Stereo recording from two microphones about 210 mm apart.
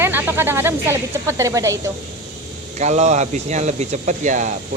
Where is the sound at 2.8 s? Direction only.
35° right (ahead or behind).